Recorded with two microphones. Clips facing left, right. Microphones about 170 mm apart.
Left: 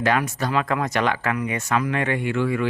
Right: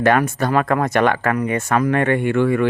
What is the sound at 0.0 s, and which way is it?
Speech, 55° right (ahead or behind).